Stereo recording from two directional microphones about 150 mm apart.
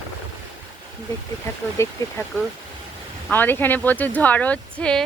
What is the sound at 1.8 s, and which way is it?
Speech, 20° left (ahead or behind).